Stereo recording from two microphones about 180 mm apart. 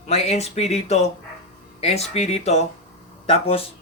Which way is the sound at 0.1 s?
35° left (ahead or behind).